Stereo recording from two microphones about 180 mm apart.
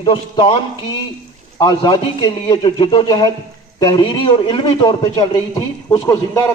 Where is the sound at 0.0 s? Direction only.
25° left (ahead or behind).